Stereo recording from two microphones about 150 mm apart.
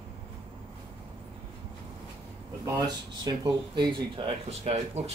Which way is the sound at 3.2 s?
30° right (ahead or behind).